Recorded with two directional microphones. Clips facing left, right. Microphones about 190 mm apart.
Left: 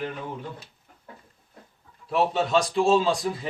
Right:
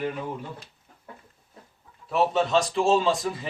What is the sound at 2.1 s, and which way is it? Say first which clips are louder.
Speech: even; centre (ahead or behind).